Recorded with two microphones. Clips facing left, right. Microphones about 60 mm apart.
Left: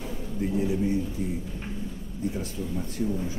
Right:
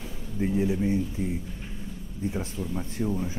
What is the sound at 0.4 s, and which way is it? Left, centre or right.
Speech, right.